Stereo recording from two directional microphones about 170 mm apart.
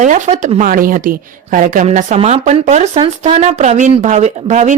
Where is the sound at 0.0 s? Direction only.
45° right (ahead or behind).